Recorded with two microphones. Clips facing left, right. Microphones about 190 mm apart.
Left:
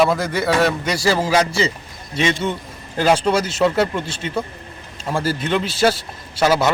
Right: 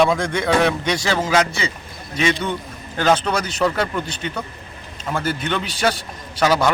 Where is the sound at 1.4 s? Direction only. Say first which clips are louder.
Left 2 dB; 30° left (ahead or behind).